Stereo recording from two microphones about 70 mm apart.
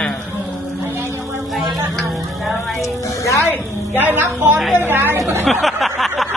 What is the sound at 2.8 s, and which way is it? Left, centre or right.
Music, left.